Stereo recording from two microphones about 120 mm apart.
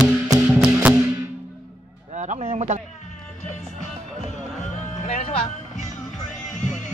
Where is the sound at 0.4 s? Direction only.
5° right (ahead or behind).